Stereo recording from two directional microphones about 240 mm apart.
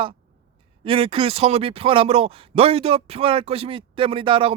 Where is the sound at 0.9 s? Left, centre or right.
Right.